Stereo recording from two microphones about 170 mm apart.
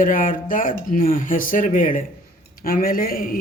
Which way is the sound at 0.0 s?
50° left (ahead or behind).